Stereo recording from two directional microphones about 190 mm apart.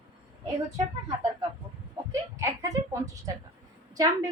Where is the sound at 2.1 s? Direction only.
15° right (ahead or behind).